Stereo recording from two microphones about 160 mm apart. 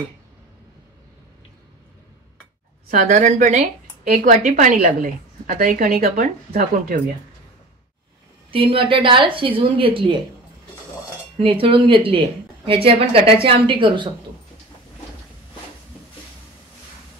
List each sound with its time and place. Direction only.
2.9 s a woman's voice: 50° right (ahead or behind)
8.5 s speech: 35° right (ahead or behind)
11.3 s speech: 35° right (ahead or behind)